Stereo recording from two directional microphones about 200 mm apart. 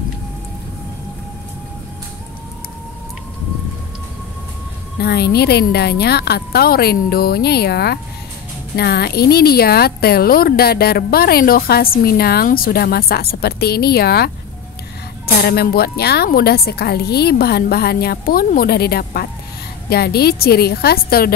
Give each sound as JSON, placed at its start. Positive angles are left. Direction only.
{"t": 5.0, "sound": "speech", "side_deg": 55}
{"t": 15.4, "sound": "speech", "side_deg": 50}